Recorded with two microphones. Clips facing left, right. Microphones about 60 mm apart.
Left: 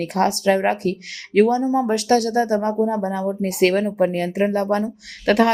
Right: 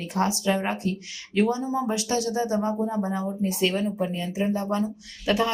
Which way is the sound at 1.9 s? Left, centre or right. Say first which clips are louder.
Left 8 dB; left.